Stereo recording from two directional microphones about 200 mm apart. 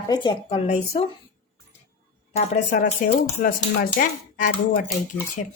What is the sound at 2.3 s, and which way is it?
Speech, 35° left (ahead or behind).